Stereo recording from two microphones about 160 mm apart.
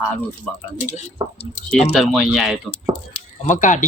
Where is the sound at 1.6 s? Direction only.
Centre (ahead or behind).